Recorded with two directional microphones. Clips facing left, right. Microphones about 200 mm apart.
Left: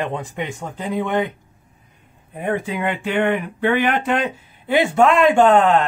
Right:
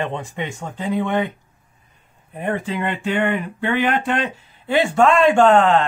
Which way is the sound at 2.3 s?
10° left (ahead or behind).